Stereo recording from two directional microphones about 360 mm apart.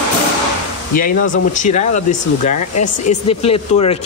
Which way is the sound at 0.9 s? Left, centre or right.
Left.